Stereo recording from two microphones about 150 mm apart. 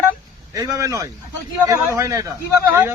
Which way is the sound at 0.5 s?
25° right (ahead or behind).